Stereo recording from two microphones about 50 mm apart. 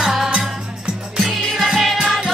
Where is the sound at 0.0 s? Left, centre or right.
Centre.